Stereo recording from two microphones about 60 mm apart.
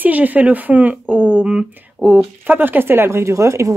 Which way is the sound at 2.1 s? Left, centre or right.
Right.